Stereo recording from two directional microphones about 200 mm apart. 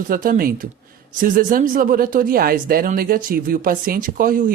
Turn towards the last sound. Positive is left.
turn(degrees=-45)  # may be behind; listen again after turning